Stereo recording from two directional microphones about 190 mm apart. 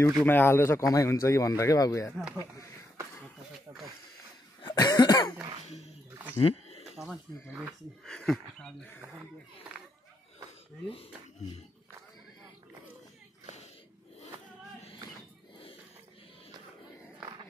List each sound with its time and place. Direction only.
0.0 s speech: 10° left (ahead or behind)
4.6 s cough: 20° left (ahead or behind)
6.4 s a sound: 35° left (ahead or behind)
8.0 s speech: 5° left (ahead or behind)